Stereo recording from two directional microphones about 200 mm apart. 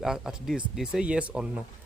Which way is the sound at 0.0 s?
5° right (ahead or behind).